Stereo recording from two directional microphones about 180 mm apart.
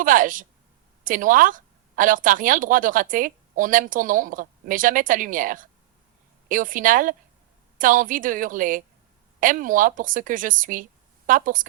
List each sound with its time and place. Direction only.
0.0 s speech: 50° right (ahead or behind)